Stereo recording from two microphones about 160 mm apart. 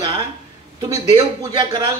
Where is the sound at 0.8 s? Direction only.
25° right (ahead or behind).